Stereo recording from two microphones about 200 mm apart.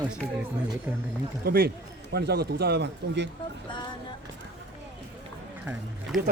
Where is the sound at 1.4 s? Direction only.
50° right (ahead or behind).